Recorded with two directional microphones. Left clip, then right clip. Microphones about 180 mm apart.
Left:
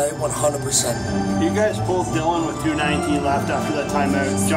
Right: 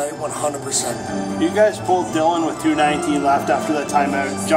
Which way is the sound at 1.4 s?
50° right (ahead or behind).